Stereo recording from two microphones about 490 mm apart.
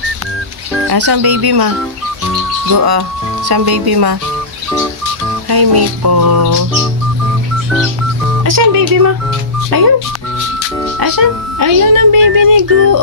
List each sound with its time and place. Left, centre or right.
0.9 s speech: right
2.7 s speech: right
5.5 s speech: right
8.5 s speech: right
11.0 s speech: right